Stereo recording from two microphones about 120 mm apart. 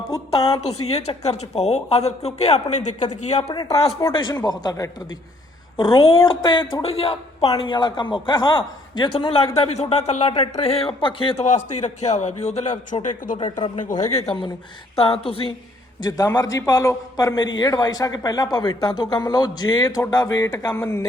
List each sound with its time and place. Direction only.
0.9 s speech: 60° left (ahead or behind)
3.5 s a man's voice: 35° left (ahead or behind)
5.7 s speech: 45° left (ahead or behind)
11.4 s a man's voice: 80° left
12.9 s speech: 90° left
14.0 s speech: 65° left (ahead or behind)
14.9 s speech: 50° left (ahead or behind)
16.0 s a man's voice: 35° left (ahead or behind)